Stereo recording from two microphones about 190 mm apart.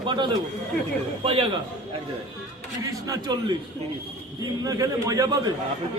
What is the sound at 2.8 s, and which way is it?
A man's voice, 20° right (ahead or behind).